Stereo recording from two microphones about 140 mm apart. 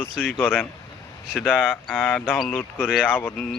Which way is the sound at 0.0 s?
10° left (ahead or behind).